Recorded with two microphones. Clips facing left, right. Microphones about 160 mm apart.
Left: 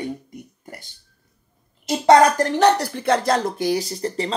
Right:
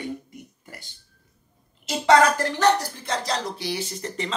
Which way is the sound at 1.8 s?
45° left (ahead or behind).